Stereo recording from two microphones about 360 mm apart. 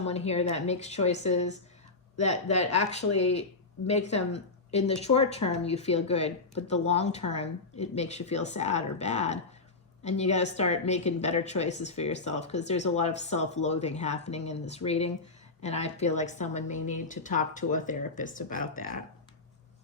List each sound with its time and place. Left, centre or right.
0.0 s a woman's voice: centre